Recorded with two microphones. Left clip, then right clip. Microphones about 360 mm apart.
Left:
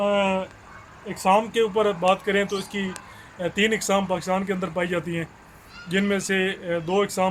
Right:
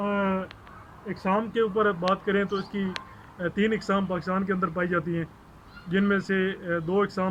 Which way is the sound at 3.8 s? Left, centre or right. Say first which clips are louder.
Left 4 dB; centre.